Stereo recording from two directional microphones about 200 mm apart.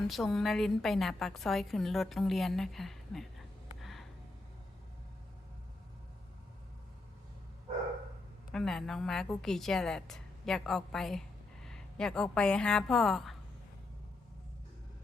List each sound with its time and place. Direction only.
0.1 s a woman's voice: centre (ahead or behind)
3.8 s a sound: centre (ahead or behind)
8.4 s a woman's voice: centre (ahead or behind)